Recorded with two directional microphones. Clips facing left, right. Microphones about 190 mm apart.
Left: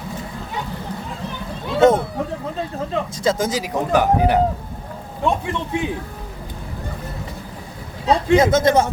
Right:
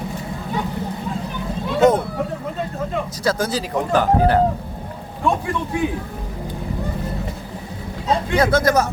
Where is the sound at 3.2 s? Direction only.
20° left (ahead or behind).